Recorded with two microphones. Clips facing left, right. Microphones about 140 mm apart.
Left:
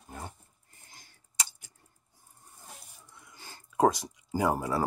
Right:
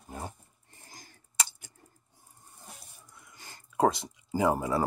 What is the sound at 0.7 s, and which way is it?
Patter, 35° right (ahead or behind).